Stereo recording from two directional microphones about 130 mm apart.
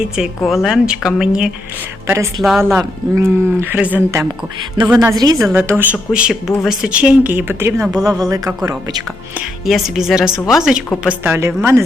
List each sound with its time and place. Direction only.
0.0 s speech: 5° right (ahead or behind)
2.0 s speech: 20° right (ahead or behind)
4.8 s a woman's voice: 40° right (ahead or behind)
5.5 s speech: 15° right (ahead or behind)
7.9 s speech: 30° right (ahead or behind)
9.6 s speech: centre (ahead or behind)
11.2 s speech: 20° right (ahead or behind)